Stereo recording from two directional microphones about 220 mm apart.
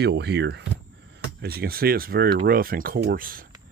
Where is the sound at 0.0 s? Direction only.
50° right (ahead or behind).